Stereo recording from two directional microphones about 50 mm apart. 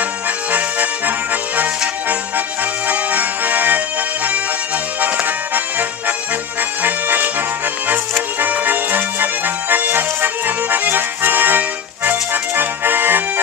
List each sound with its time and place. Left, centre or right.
0.5 s accordion: right
2.9 s accordion: right
5.0 s music: right
6.8 s accordion: right
8.4 s music: right